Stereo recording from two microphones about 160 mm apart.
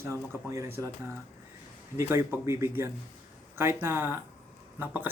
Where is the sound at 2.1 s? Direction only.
15° right (ahead or behind).